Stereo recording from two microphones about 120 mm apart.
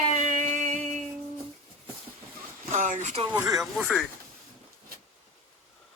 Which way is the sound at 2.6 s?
90° right.